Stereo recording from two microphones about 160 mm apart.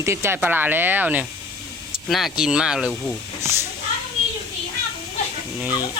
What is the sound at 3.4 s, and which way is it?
Speech, 15° right (ahead or behind).